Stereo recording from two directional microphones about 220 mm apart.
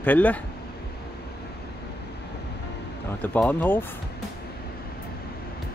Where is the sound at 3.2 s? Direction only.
5° left (ahead or behind).